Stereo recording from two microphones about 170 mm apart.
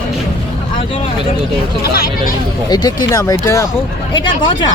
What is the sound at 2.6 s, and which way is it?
Speech, 25° left (ahead or behind).